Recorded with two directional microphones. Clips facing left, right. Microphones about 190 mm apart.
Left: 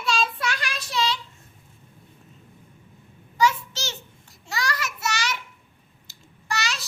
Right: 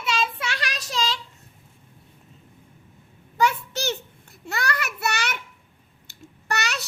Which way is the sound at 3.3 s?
60° right (ahead or behind).